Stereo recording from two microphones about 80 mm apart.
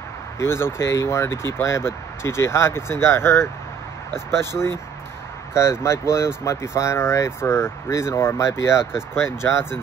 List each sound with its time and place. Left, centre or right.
0.4 s speech: left